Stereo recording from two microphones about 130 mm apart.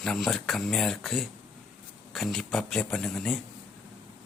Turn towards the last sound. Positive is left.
turn(degrees=5)  # may be behind; listen again after turning